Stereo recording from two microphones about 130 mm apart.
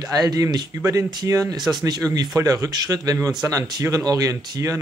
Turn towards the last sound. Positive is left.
turn(degrees=-30)  # may be behind; listen again after turning